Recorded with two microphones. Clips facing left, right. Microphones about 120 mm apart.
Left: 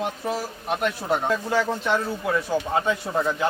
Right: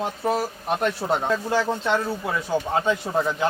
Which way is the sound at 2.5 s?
20° right (ahead or behind).